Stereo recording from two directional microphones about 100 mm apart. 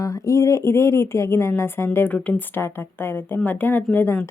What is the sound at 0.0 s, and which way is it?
A woman's voice, 35° left (ahead or behind).